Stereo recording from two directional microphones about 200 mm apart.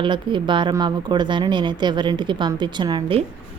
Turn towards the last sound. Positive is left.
turn(degrees=-25)  # may be behind; listen again after turning